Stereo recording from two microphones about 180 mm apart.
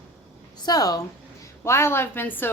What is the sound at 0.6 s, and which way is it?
A woman's voice, 20° left (ahead or behind).